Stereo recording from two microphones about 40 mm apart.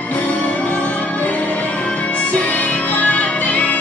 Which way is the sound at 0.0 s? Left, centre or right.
Left.